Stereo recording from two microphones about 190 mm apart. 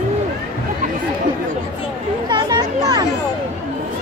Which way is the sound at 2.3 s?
20° right (ahead or behind).